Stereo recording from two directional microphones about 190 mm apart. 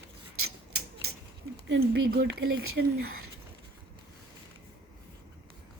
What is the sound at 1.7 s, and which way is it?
Speech, 55° right (ahead or behind).